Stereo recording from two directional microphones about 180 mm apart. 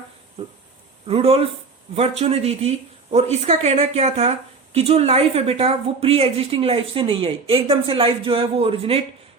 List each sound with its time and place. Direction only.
0.4 s speech: 30° right (ahead or behind)